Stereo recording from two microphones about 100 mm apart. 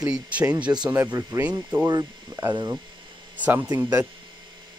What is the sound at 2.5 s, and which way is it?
Speech, 45° right (ahead or behind).